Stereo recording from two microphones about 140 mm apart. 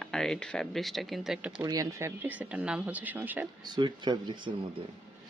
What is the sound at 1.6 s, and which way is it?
Speech, 20° right (ahead or behind).